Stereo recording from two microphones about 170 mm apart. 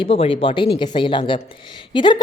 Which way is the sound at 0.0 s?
35° left (ahead or behind).